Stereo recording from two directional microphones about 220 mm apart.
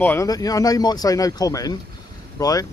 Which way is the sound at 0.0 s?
10° left (ahead or behind).